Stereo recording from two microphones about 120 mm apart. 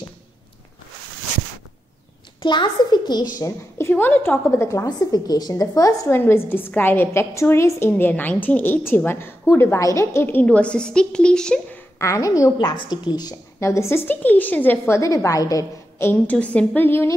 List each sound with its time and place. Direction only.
2.4 s a woman's voice: 40° left (ahead or behind)
3.3 s a woman's voice: 25° left (ahead or behind); by 11.8 s 10° left (ahead or behind)
12.0 s a woman's voice: 25° left (ahead or behind)
12.6 s a woman's voice: 40° left (ahead or behind)
13.7 s a woman's voice: 20° left (ahead or behind)
16.1 s a woman's voice: 10° left (ahead or behind)